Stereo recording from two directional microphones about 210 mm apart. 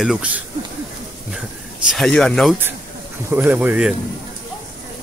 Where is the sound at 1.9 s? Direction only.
Centre (ahead or behind).